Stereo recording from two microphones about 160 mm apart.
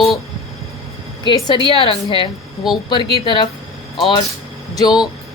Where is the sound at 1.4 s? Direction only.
30° left (ahead or behind).